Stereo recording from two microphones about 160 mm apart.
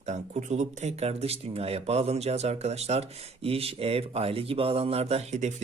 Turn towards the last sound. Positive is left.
turn(degrees=-45)  # may be behind; listen again after turning